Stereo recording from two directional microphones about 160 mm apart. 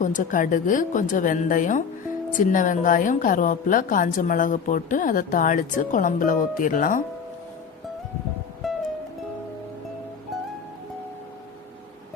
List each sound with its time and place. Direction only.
0.0 s a woman's voice: 55° left (ahead or behind)
8.6 s music: centre (ahead or behind)